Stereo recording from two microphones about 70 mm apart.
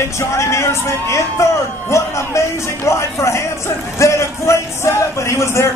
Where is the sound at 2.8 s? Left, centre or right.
Left.